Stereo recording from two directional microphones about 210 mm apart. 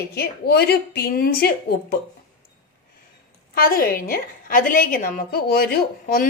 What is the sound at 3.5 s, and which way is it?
A woman's voice, 45° left (ahead or behind).